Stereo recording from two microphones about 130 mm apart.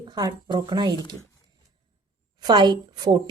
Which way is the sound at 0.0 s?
30° right (ahead or behind).